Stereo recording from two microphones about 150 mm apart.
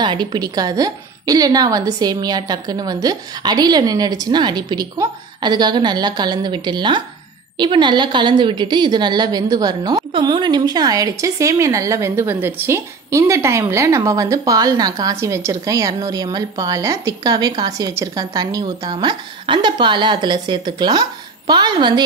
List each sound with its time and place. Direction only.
0.0 s a woman's voice: 30° right (ahead or behind)